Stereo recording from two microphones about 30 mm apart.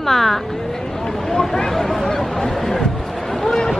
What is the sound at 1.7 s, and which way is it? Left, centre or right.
Speech, centre.